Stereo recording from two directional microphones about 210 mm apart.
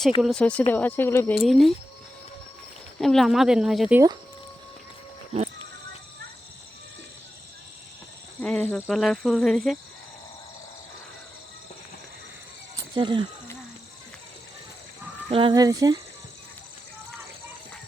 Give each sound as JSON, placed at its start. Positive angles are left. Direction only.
{"t": 0.2, "sound": "speech", "side_deg": 0}
{"t": 1.4, "sound": "speech", "side_deg": 0}
{"t": 3.0, "sound": "speech", "side_deg": 0}
{"t": 8.4, "sound": "snake", "side_deg": 5}
{"t": 8.7, "sound": "speech", "side_deg": 0}
{"t": 12.9, "sound": "speech", "side_deg": -20}
{"t": 15.3, "sound": "speech", "side_deg": -25}